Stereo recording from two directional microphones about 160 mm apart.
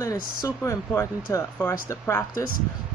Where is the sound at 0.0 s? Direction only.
20° left (ahead or behind).